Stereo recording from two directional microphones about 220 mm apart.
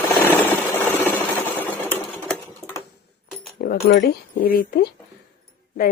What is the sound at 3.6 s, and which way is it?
Speech, 45° left (ahead or behind).